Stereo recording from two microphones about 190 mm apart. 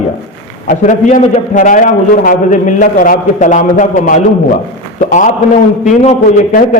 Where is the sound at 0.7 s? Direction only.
40° left (ahead or behind).